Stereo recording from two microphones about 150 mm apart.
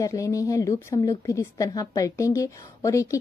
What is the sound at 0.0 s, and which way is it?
A woman's voice, 20° left (ahead or behind).